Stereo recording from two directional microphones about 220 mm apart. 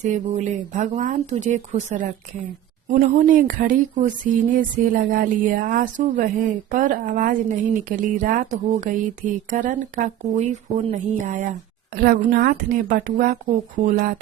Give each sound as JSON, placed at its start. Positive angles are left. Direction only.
{"t": 0.0, "sound": "speech", "side_deg": -35}